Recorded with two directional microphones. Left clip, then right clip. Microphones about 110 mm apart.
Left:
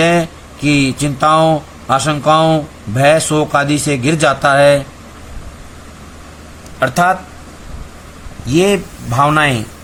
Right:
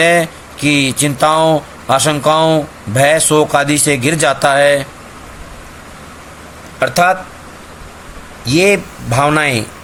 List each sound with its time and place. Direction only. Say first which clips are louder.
0.0 s speech: right 2 dB; 55° right (ahead or behind)
6.7 s speech: right 1 dB; 30° right (ahead or behind)
8.4 s a man's voice: right 2 dB; 30° right (ahead or behind)